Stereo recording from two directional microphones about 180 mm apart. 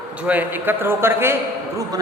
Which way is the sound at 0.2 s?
10° right (ahead or behind).